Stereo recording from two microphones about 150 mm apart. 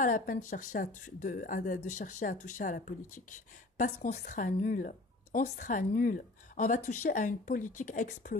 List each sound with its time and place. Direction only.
0.0 s speech: 60° left (ahead or behind)